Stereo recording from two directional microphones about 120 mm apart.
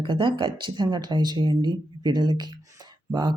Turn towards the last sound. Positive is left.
turn(degrees=-40)  # may be behind; listen again after turning